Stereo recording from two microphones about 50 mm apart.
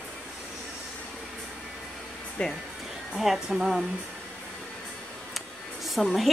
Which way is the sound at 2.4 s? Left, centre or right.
Left.